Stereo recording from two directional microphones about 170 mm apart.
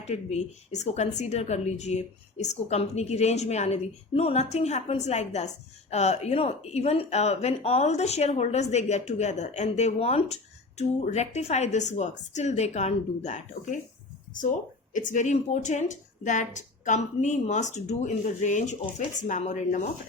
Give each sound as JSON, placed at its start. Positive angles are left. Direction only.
{"t": 0.0, "sound": "speech", "side_deg": 40}
{"t": 14.9, "sound": "a woman's voice", "side_deg": 45}